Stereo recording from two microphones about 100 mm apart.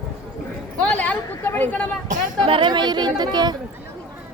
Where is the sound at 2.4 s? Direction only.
55° right (ahead or behind).